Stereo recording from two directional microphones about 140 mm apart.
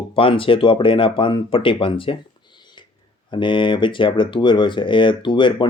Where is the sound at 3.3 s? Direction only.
35° left (ahead or behind).